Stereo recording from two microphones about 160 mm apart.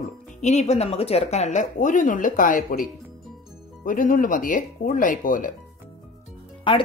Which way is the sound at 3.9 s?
55° left (ahead or behind).